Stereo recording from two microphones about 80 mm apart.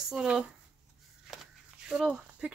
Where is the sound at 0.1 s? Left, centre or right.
Centre.